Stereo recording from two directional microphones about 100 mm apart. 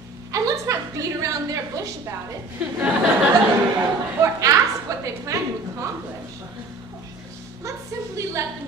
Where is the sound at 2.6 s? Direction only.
10° right (ahead or behind).